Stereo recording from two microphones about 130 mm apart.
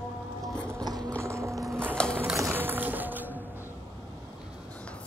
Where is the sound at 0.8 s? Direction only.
30° right (ahead or behind).